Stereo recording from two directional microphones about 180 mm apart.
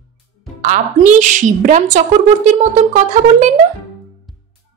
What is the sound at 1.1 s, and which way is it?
A woman's voice, 45° right (ahead or behind).